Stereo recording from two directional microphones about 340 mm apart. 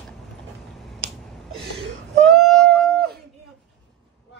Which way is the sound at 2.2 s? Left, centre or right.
Centre.